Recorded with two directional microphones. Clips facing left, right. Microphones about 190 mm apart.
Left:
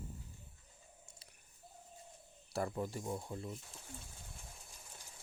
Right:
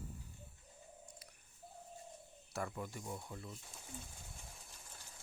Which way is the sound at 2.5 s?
35° left (ahead or behind).